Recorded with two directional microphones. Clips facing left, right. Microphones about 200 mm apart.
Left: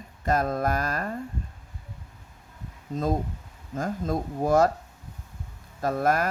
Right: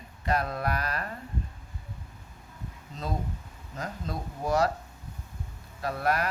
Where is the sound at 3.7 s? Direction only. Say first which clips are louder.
Left 8 dB; 50° left (ahead or behind).